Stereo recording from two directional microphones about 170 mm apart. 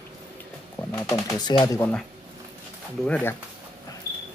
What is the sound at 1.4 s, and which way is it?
Speech, 25° left (ahead or behind).